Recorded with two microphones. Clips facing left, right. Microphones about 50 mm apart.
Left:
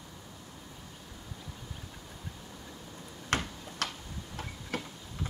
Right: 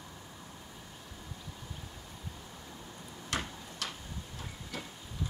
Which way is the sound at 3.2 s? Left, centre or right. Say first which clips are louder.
Left 4 dB; left.